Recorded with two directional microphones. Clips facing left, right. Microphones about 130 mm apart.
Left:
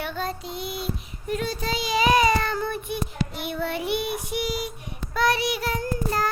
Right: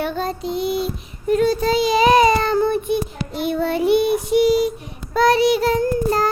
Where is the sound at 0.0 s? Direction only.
35° right (ahead or behind).